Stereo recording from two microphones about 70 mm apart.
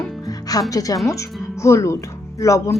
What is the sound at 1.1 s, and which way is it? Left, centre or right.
Speech, left.